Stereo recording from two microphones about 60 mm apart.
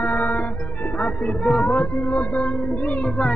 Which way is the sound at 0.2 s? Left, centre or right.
Left.